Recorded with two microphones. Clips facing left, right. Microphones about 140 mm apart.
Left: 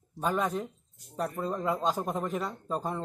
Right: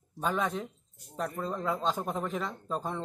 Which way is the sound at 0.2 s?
5° left (ahead or behind).